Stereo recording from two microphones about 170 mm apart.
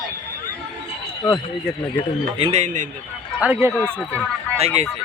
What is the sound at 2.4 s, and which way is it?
Speech, 40° right (ahead or behind).